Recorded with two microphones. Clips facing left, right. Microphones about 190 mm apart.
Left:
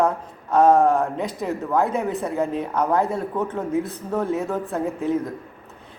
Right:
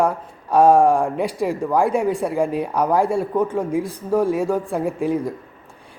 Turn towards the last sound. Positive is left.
turn(degrees=-10)  # may be behind; listen again after turning